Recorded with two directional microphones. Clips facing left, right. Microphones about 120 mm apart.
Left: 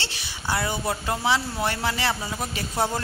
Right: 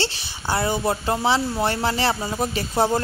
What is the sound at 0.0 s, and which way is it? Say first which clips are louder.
Speech: right 6 dB; 30° right (ahead or behind).